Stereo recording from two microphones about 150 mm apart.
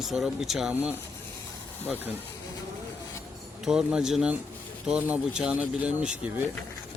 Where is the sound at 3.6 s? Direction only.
5° right (ahead or behind).